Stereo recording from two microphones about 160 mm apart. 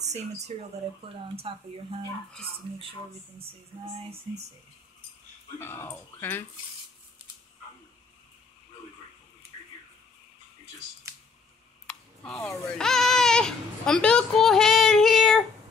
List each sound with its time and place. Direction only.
1.0 s speech: 35° right (ahead or behind)
5.6 s speech: 15° left (ahead or behind)
11.9 s speech: 5° left (ahead or behind)